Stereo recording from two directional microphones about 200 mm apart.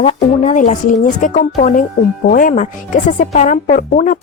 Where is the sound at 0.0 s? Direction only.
35° left (ahead or behind).